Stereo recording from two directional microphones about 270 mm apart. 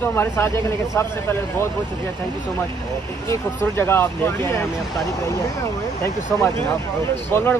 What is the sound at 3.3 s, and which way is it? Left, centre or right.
Speech, centre.